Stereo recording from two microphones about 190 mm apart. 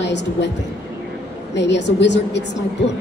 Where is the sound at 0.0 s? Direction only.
65° left (ahead or behind).